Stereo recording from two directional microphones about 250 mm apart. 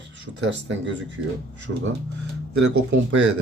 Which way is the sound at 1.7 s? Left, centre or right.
Right.